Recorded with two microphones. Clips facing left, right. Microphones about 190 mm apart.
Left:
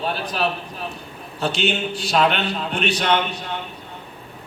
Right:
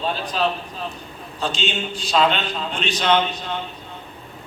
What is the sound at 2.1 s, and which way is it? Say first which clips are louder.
A man's voice: even; 60° left (ahead or behind).